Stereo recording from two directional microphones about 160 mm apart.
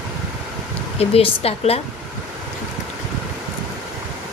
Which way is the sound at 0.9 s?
40° left (ahead or behind).